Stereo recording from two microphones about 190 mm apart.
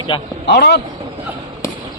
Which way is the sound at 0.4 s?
65° left (ahead or behind).